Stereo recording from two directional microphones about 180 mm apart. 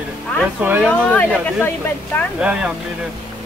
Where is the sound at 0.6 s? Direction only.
10° right (ahead or behind).